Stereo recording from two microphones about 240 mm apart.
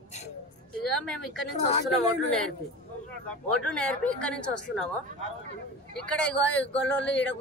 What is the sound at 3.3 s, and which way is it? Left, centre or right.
Speech, centre.